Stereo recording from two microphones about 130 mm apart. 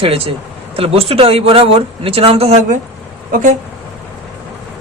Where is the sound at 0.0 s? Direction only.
45° right (ahead or behind).